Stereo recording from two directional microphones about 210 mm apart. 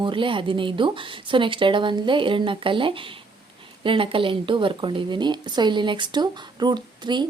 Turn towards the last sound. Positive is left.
turn(degrees=-20)  # may be behind; listen again after turning